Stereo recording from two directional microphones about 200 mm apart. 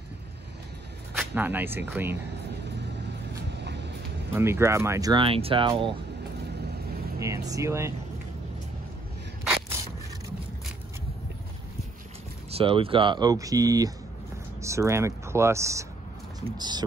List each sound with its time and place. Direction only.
1.1 s speech: 10° right (ahead or behind)
3.4 s vehicle: 55° right (ahead or behind)
4.4 s speech: 10° right (ahead or behind)
7.2 s speech: 15° right (ahead or behind)
12.4 s speech: 30° right (ahead or behind)